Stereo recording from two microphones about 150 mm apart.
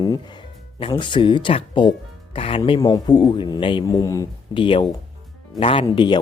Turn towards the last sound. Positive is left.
turn(degrees=35)  # may be behind; listen again after turning